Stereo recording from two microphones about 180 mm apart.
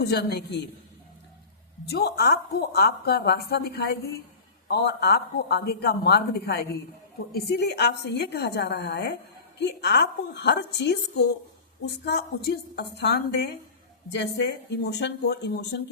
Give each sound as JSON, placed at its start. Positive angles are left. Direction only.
{"t": 0.0, "sound": "a woman's voice", "side_deg": 65}
{"t": 1.9, "sound": "a woman's voice", "side_deg": 65}